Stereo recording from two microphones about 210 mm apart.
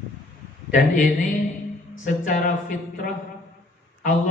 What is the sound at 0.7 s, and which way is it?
Speech, 40° left (ahead or behind).